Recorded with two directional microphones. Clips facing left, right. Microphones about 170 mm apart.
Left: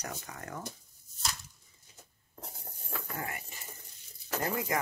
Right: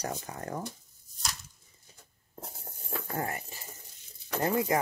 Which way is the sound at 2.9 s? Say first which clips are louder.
Right 5 dB; 35° right (ahead or behind).